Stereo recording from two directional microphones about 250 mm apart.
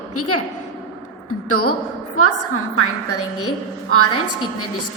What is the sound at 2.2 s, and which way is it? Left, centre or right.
Speech, left.